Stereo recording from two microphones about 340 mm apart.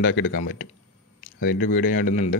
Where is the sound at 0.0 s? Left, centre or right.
Left.